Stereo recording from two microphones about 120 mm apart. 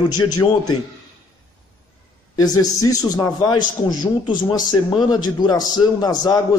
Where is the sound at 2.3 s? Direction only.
30° left (ahead or behind).